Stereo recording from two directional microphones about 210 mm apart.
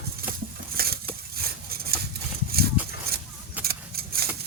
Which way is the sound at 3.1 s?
45° right (ahead or behind).